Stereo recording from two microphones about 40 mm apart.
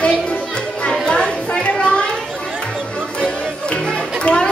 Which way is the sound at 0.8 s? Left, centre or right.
Left.